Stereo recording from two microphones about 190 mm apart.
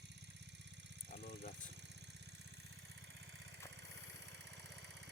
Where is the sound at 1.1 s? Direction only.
45° left (ahead or behind).